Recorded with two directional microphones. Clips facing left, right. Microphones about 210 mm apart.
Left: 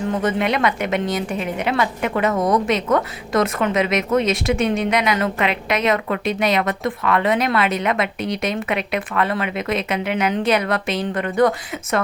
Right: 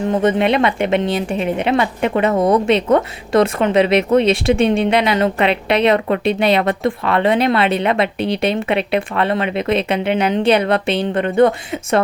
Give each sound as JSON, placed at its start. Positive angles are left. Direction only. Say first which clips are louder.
{"t": 0.2, "sound": "a woman's voice", "louder": "right 5 dB", "side_deg": -25}